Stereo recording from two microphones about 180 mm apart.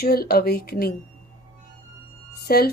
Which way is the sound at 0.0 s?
60° left (ahead or behind).